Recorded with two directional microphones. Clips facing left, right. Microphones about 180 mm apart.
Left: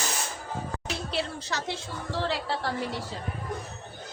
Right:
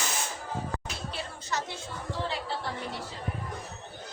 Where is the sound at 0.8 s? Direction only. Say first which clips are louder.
Left 6 dB; 80° left.